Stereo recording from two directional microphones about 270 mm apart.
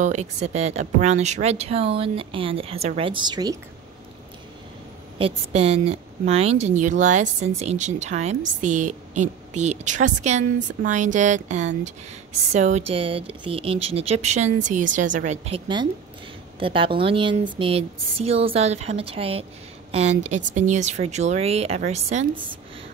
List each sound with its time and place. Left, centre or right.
0.0 s a woman's voice: right
5.2 s a woman's voice: right